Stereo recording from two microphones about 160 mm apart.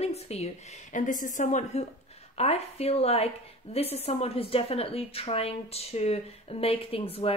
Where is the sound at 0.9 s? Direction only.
55° left (ahead or behind).